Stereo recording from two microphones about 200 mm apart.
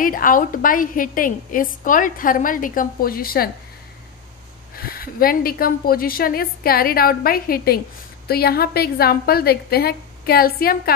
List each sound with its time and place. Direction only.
0.0 s a woman's voice: 45° left (ahead or behind)
4.7 s a woman's voice: 50° left (ahead or behind)